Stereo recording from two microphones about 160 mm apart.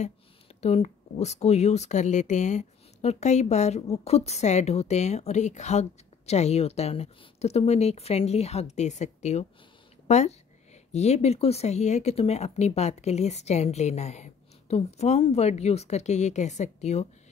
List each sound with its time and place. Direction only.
0.6 s speech: 40° left (ahead or behind)